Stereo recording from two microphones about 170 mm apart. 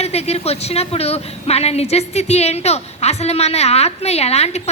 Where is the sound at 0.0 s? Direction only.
40° left (ahead or behind).